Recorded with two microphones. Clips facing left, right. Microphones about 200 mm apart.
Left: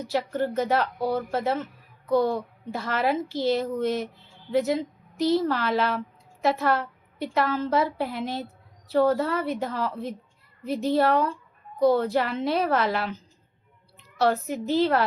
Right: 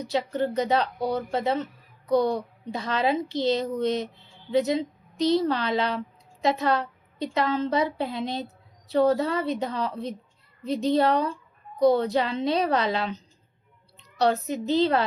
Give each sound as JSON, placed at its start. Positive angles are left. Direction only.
{"t": 0.0, "sound": "a woman's voice", "side_deg": -20}